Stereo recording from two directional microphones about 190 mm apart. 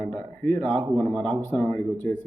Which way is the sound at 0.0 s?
5° left (ahead or behind).